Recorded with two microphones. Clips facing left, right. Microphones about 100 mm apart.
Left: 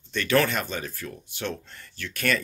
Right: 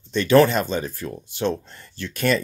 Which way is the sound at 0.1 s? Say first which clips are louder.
Right 7 dB; 25° right (ahead or behind).